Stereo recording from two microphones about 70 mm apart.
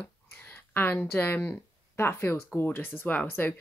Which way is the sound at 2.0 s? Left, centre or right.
Left.